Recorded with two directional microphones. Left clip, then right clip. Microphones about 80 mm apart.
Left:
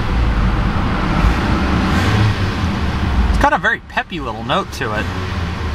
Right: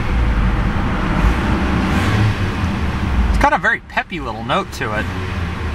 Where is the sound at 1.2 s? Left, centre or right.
Left.